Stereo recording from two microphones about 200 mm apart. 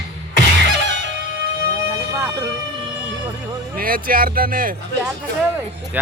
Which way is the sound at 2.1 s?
15° right (ahead or behind).